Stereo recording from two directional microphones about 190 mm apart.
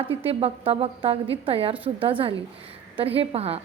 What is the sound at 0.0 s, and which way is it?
A woman's voice, 30° right (ahead or behind).